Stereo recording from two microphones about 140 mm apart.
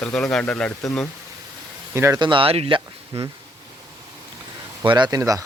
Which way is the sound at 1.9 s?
20° right (ahead or behind).